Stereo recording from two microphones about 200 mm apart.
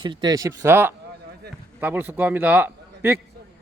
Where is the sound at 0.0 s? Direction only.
20° right (ahead or behind).